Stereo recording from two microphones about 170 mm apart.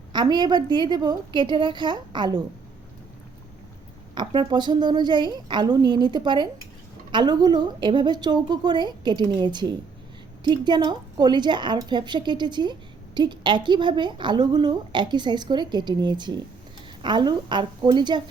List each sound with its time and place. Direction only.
0.1 s a woman's voice: 25° right (ahead or behind)
4.1 s a woman's voice: 25° right (ahead or behind)